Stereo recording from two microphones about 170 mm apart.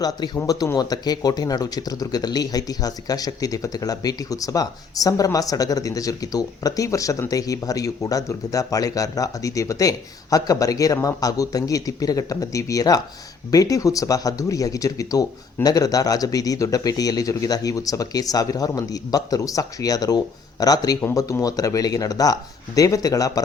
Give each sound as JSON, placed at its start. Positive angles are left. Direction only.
{"t": 0.0, "sound": "speech", "side_deg": 20}